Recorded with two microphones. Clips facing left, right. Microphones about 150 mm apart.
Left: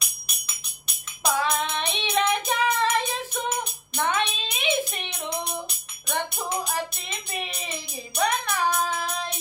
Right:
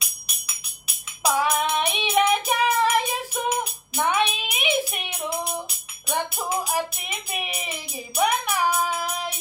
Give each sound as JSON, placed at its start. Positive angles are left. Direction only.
{"t": 0.0, "sound": "music", "side_deg": -5}